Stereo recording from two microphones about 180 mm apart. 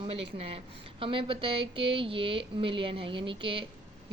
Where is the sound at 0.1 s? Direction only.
30° right (ahead or behind).